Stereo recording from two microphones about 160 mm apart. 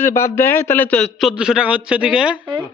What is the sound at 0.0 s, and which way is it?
A man's voice, 15° left (ahead or behind).